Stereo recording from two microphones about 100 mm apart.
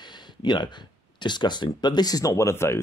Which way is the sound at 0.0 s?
45° left (ahead or behind).